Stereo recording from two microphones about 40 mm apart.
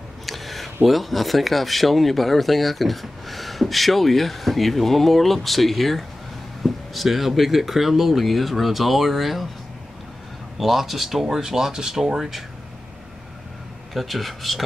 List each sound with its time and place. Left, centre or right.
0.3 s a sound: centre
0.8 s speech: centre
10.6 s speech: centre
13.9 s speech: centre